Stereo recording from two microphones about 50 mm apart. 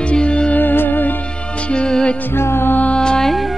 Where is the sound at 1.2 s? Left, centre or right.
Left.